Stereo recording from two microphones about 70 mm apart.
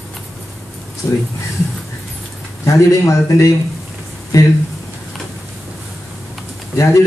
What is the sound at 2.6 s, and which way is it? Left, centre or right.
Speech, left.